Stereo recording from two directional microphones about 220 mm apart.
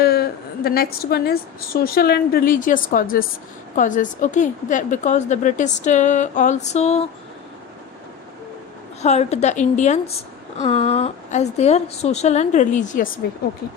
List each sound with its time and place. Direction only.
0.0 s a woman's voice: 45° left (ahead or behind); by 7.1 s 30° left (ahead or behind)
9.0 s a woman's voice: 30° left (ahead or behind)